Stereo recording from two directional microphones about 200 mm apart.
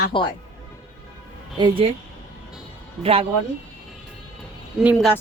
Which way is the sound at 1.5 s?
25° right (ahead or behind).